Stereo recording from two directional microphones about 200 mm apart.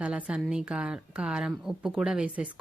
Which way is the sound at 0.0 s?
5° right (ahead or behind).